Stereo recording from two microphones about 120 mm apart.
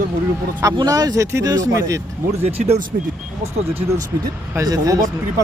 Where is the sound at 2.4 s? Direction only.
60° right (ahead or behind).